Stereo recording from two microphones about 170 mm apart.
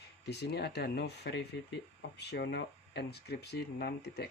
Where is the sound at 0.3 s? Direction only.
75° left (ahead or behind).